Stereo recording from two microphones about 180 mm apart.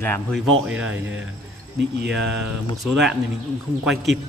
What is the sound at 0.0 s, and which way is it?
Speech, 10° left (ahead or behind).